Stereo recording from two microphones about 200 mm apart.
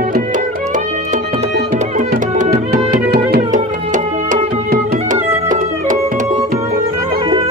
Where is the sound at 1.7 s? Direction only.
35° right (ahead or behind).